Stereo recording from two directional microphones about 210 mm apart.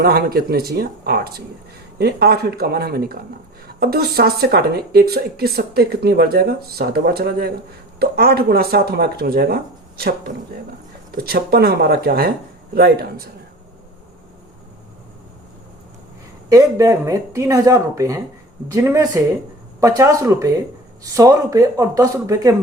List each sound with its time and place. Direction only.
0.0 s speech: 50° right (ahead or behind)
16.5 s speech: 15° right (ahead or behind)